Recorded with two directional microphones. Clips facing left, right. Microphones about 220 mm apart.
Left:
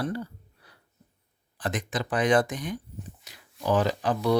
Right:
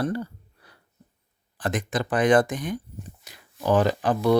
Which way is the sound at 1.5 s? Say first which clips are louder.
Right 4 dB; 50° right (ahead or behind).